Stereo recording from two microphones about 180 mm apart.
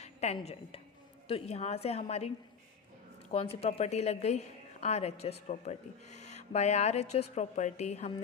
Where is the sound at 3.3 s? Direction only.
35° left (ahead or behind).